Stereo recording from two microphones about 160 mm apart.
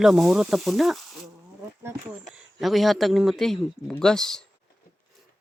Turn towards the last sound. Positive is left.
turn(degrees=5)  # may be behind; listen again after turning